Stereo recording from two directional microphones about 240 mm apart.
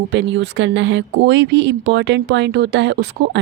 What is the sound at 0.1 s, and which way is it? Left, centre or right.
Speech, right.